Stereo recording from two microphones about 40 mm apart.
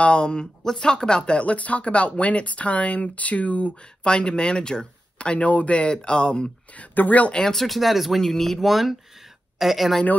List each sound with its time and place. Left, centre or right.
0.0 s speech: left
4.0 s speech: left
6.7 s speech: left
7.5 s speech: centre
8.2 s speech: centre